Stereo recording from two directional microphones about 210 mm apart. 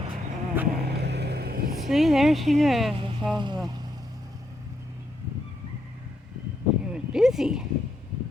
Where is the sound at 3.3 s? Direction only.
20° right (ahead or behind).